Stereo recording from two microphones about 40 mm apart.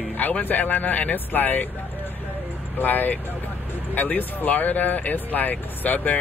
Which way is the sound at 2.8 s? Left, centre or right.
Left.